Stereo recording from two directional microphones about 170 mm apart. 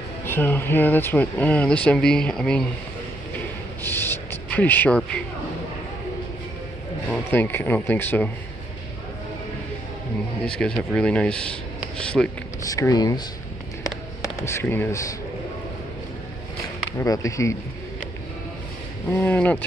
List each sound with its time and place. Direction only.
0.2 s speech: 15° left (ahead or behind)
3.8 s a sound: 10° left (ahead or behind)
7.1 s speech: 10° left (ahead or behind)
10.4 s speech: 5° left (ahead or behind)
12.6 s speech: 20° left (ahead or behind)
14.4 s speech: 15° left (ahead or behind)
17.0 s speech: 20° left (ahead or behind)
19.1 s speech: 10° left (ahead or behind)